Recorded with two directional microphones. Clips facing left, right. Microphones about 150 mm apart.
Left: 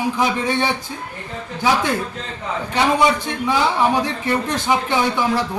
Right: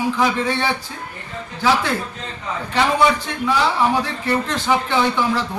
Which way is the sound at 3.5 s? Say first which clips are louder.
Even; 15° left (ahead or behind).